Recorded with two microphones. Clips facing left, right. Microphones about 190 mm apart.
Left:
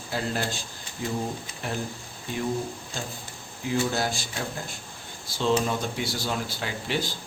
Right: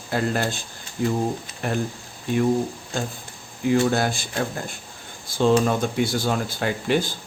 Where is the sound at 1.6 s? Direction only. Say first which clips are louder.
Right 6 dB; 55° right (ahead or behind).